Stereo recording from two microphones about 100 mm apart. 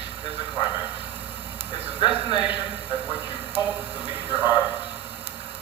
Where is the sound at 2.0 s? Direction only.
55° left (ahead or behind).